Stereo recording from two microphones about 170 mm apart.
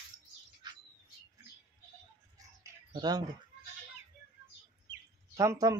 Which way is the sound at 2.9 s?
25° right (ahead or behind).